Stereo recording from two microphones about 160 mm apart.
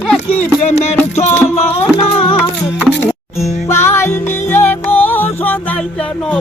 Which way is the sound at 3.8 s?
15° left (ahead or behind).